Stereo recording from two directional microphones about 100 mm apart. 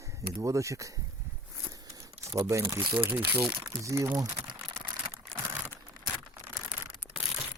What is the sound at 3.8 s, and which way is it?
Speech, 35° right (ahead or behind).